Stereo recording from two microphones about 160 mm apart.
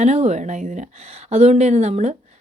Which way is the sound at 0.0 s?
45° right (ahead or behind).